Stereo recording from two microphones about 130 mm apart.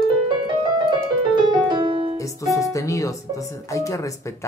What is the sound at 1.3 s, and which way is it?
Music, 35° right (ahead or behind).